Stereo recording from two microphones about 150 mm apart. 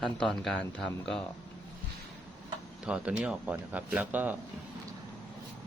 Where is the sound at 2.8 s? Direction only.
5° right (ahead or behind).